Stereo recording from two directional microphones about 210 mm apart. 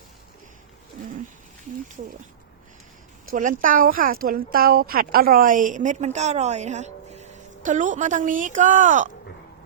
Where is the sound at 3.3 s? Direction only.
40° right (ahead or behind).